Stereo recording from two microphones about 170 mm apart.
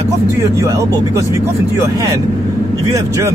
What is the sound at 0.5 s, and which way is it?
Speech, 20° right (ahead or behind).